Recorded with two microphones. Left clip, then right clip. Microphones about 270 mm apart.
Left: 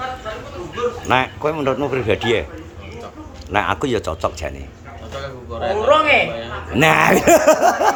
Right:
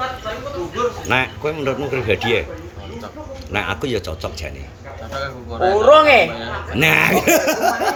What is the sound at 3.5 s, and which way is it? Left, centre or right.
Speech, centre.